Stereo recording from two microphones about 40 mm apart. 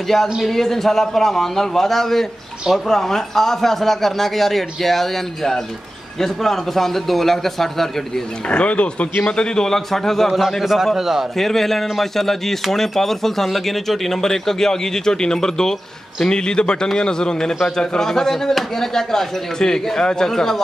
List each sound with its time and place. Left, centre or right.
0.4 s speech: centre
8.5 s speech: left
9.2 s speech: centre
10.3 s a man's voice: centre
11.3 s a man's voice: centre